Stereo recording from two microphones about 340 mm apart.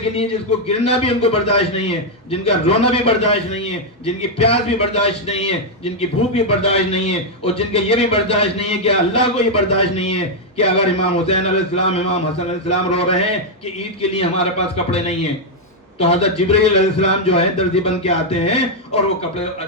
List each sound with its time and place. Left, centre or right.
0.7 s a man's voice: centre